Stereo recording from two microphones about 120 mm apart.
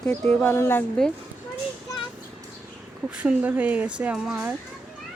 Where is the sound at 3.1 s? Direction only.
10° right (ahead or behind).